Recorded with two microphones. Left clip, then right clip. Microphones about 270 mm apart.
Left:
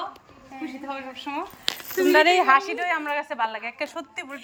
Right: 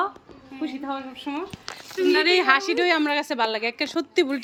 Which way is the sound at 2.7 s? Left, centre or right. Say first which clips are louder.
Right 4 dB; centre.